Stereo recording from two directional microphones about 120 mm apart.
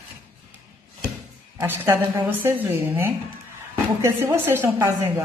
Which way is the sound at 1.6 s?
20° right (ahead or behind).